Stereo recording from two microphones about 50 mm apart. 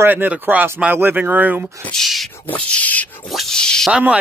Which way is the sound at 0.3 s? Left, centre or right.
Right.